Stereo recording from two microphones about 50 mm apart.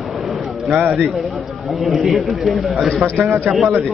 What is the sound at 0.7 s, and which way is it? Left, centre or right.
Speech, right.